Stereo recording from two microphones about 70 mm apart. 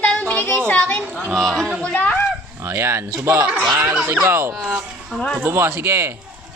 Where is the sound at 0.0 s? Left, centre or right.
Centre.